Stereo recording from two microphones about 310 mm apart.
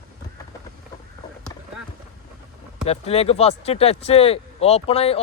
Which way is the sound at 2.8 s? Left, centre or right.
Centre.